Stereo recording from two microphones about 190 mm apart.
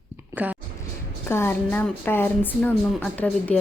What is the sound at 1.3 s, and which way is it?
Speech, 10° left (ahead or behind).